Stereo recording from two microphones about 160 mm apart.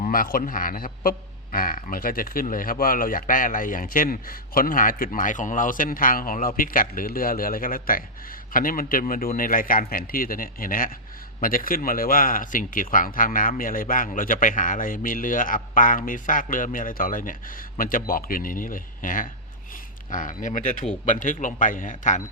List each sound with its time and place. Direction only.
0.1 s speech: 65° left (ahead or behind)